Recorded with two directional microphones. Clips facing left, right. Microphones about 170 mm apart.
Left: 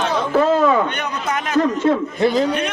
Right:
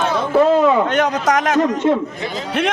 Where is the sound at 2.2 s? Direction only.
45° left (ahead or behind).